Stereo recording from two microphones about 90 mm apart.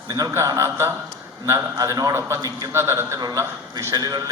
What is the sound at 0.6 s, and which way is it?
A man's voice, 30° right (ahead or behind).